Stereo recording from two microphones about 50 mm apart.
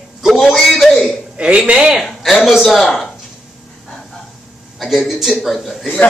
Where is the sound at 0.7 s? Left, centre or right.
Centre.